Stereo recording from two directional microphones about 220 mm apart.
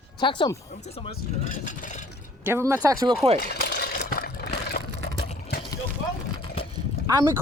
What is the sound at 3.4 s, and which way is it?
Vehicle, 45° left (ahead or behind).